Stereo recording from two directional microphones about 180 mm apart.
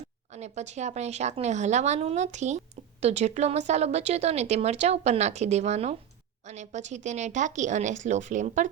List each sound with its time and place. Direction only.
0.3 s speech: 40° right (ahead or behind)